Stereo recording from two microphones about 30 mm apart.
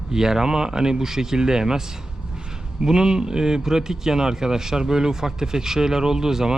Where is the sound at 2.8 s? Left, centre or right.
Right.